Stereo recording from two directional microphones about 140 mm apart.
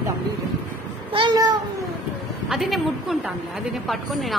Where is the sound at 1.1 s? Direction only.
35° right (ahead or behind).